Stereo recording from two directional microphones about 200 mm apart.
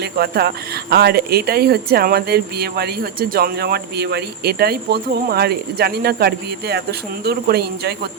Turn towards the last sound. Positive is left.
turn(degrees=-55)  # may be behind; listen again after turning